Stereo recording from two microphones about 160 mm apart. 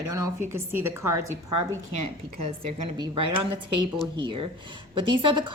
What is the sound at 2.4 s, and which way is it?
A woman's voice, 40° right (ahead or behind).